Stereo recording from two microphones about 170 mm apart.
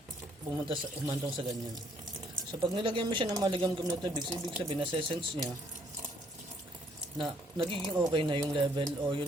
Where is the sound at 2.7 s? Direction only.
30° right (ahead or behind).